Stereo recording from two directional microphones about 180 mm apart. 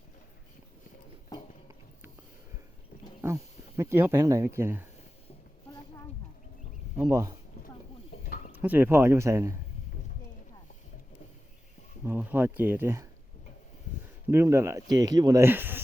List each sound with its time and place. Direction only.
3.8 s speech: 15° right (ahead or behind)
7.1 s speech: 15° right (ahead or behind)
8.2 s a sound: 50° left (ahead or behind)
8.6 s speech: 10° right (ahead or behind)
12.0 s speech: 10° right (ahead or behind)
14.3 s speech: 15° right (ahead or behind)